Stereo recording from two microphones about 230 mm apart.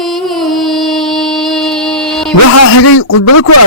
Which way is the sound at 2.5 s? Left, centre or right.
Left.